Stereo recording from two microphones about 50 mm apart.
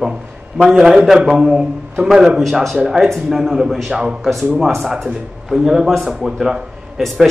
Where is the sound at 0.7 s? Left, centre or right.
Centre.